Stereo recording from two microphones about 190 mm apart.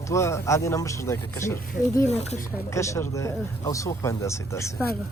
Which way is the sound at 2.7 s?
15° left (ahead or behind).